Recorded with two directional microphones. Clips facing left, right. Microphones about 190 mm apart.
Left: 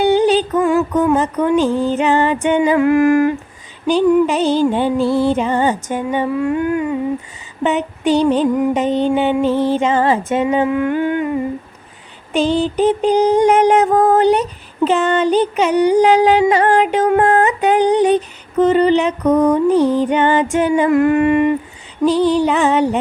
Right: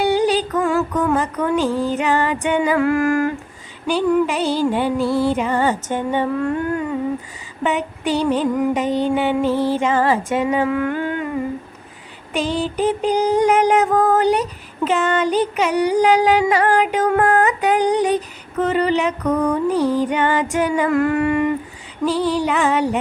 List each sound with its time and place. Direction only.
0.0 s music: 25° left (ahead or behind)
7.6 s a sound: 25° left (ahead or behind)
8.3 s music: 25° left (ahead or behind)
12.3 s music: 25° left (ahead or behind)
22.1 s music: 5° right (ahead or behind)
22.4 s music: 25° left (ahead or behind)